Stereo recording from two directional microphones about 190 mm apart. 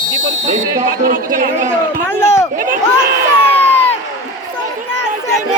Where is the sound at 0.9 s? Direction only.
45° right (ahead or behind).